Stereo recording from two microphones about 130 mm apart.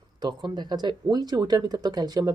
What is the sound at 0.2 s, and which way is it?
Speech, 35° right (ahead or behind).